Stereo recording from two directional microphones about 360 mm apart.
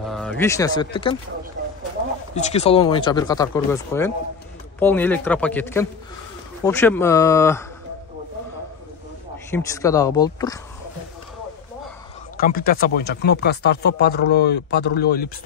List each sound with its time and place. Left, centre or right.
0.0 s speech: centre
1.6 s a sound: right
2.3 s a man's voice: centre
9.5 s speech: centre
12.4 s speech: left